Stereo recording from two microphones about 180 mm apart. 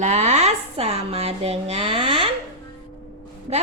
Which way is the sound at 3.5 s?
35° right (ahead or behind).